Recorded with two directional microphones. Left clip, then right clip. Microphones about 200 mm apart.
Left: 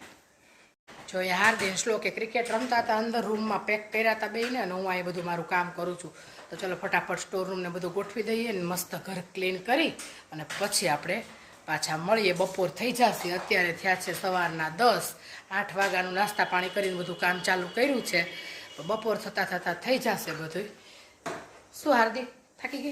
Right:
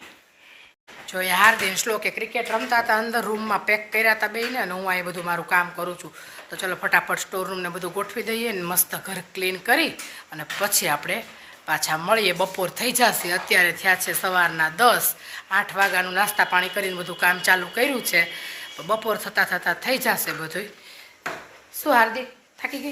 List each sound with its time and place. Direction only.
1.0 s speech: 5° left (ahead or behind)
21.8 s a woman's voice: 15° right (ahead or behind)